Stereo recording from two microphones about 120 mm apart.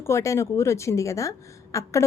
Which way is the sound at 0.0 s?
25° left (ahead or behind).